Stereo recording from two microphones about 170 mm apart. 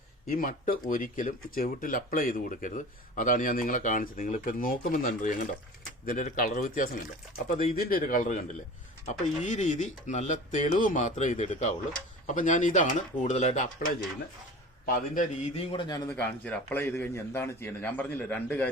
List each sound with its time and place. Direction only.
0.3 s a man's voice: 55° left (ahead or behind)
9.4 s speech: 45° left (ahead or behind)
15.5 s a man's voice: 30° left (ahead or behind)
16.0 s a man's voice: 10° left (ahead or behind)